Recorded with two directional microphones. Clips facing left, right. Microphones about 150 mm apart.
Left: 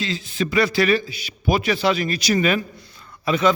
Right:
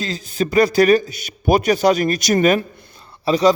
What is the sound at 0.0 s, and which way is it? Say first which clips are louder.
Speech: right 2 dB; 45° right (ahead or behind).